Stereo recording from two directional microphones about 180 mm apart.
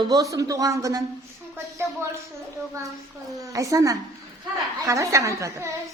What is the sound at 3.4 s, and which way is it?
A woman's voice, 20° right (ahead or behind).